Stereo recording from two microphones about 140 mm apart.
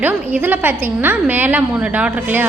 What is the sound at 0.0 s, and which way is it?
A woman's voice, 10° right (ahead or behind).